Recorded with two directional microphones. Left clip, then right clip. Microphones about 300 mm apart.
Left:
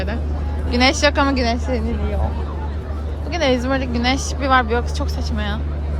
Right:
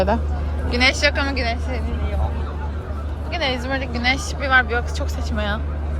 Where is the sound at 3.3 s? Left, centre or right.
Left.